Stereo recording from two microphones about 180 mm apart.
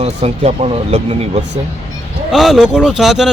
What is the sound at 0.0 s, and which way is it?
Speech, 35° right (ahead or behind).